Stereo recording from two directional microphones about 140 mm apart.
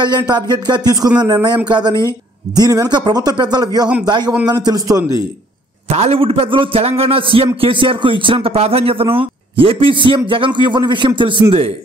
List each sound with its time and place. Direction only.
0.0 s a man's voice: 30° right (ahead or behind)
5.9 s a man's voice: 50° right (ahead or behind)